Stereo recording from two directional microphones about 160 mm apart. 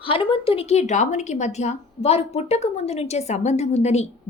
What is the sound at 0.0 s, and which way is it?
A woman's voice, 35° left (ahead or behind).